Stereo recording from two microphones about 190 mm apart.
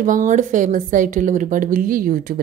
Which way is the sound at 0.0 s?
40° right (ahead or behind).